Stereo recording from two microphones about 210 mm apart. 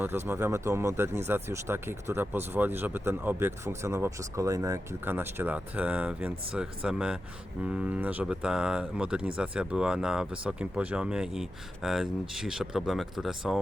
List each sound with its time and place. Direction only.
0.0 s speech: 10° right (ahead or behind)